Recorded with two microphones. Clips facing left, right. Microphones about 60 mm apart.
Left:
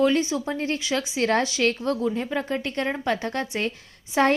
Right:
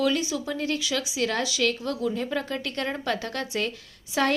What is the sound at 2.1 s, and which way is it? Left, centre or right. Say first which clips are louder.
A woman's voice: left 2 dB; centre.